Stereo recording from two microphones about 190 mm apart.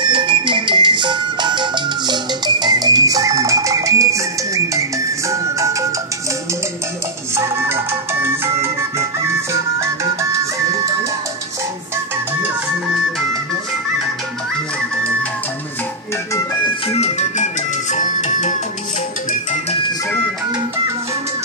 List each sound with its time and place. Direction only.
0.0 s music: 25° right (ahead or behind)
7.3 s music: 15° right (ahead or behind)
16.9 s music: 35° left (ahead or behind)